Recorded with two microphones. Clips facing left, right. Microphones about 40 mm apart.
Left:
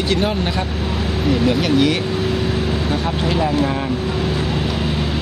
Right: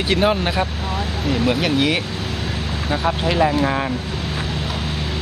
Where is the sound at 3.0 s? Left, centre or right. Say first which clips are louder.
Right 5 dB; centre.